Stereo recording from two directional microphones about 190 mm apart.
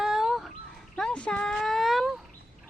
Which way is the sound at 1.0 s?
5° left (ahead or behind).